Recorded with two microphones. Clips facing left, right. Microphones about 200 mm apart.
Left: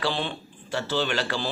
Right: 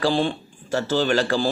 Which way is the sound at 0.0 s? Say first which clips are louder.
Right 7 dB; 40° right (ahead or behind).